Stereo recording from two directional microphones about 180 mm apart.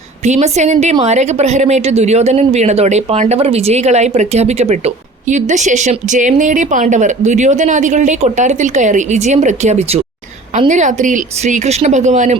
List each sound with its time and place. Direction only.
0.3 s a woman's voice: 40° right (ahead or behind)